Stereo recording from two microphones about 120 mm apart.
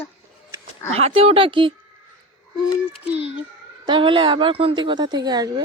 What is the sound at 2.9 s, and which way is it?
Speech, 10° right (ahead or behind).